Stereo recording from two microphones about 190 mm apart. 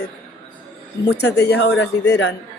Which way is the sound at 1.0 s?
60° left (ahead or behind).